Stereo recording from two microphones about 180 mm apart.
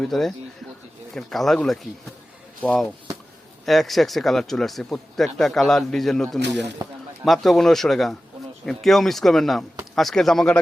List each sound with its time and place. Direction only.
0.0 s speech: centre (ahead or behind)
6.8 s speech: 20° right (ahead or behind)
7.3 s speech: centre (ahead or behind)